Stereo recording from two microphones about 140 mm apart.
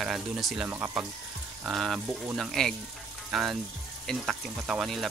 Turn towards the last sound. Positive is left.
turn(degrees=0)  # may be behind; listen again after turning